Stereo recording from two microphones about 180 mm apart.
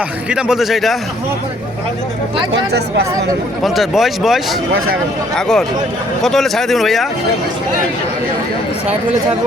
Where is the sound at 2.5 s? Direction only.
65° right (ahead or behind).